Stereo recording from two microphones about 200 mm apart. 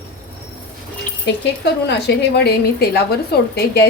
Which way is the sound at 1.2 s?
55° left (ahead or behind).